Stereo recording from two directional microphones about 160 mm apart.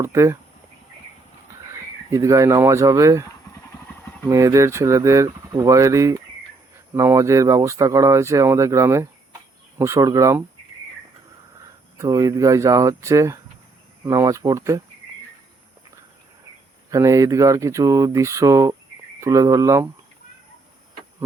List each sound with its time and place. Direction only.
0.0 s speech: 15° right (ahead or behind)
1.7 s speech: 20° right (ahead or behind)
4.3 s speech: 20° right (ahead or behind)
11.9 s speech: 20° right (ahead or behind)
16.9 s speech: 20° right (ahead or behind)